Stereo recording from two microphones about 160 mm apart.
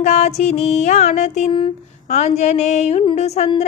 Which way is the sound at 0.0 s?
50° left (ahead or behind).